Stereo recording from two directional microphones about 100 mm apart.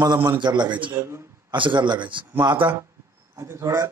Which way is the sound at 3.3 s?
30° right (ahead or behind).